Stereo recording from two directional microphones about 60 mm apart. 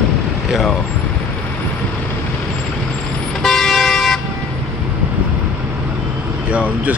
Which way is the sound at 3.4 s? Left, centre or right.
Centre.